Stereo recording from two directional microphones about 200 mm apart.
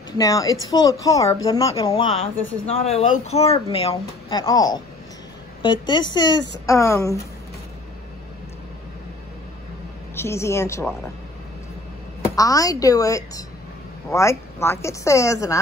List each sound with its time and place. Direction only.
0.2 s a woman's voice: 20° left (ahead or behind)
2.6 s a woman's voice: 30° left (ahead or behind); by 7.2 s 15° left (ahead or behind)
10.1 s a woman's voice: 15° left (ahead or behind)
12.4 s a woman's voice: 15° left (ahead or behind)